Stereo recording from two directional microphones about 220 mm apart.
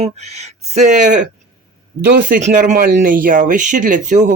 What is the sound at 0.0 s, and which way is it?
Speech, 30° right (ahead or behind).